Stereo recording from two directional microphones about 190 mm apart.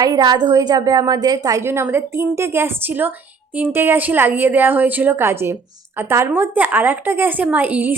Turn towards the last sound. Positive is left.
turn(degrees=-10)  # may be behind; listen again after turning